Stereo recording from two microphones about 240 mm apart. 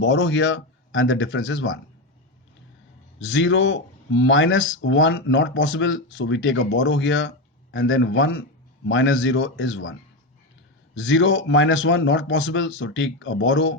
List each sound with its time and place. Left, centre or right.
0.0 s speech: left
3.2 s speech: left
11.0 s speech: left